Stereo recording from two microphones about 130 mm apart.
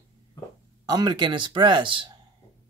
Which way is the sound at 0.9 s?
35° right (ahead or behind).